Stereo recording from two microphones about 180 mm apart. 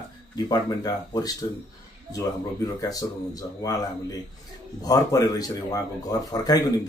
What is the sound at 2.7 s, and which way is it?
Speech, 20° left (ahead or behind).